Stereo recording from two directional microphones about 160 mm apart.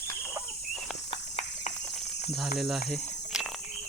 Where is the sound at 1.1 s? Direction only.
40° left (ahead or behind).